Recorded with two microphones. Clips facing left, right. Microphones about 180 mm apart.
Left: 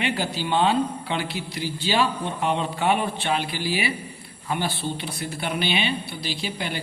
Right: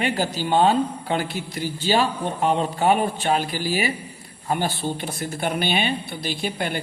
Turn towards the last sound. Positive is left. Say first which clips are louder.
# right 3 dB
turn(degrees=-50)  # may be behind; listen again after turning